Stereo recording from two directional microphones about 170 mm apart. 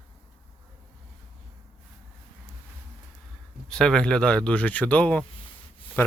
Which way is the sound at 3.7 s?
5° left (ahead or behind).